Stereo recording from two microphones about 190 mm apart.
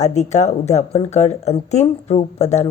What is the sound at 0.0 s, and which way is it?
Speech, 35° left (ahead or behind).